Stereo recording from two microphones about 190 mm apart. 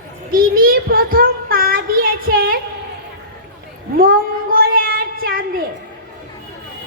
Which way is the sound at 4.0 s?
50° right (ahead or behind).